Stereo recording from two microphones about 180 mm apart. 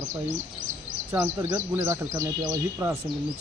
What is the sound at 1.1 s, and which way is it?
Speech, 20° right (ahead or behind).